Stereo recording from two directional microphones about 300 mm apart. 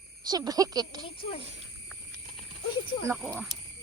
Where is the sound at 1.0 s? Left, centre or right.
Centre.